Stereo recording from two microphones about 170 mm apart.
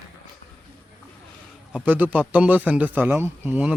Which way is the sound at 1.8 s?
10° right (ahead or behind).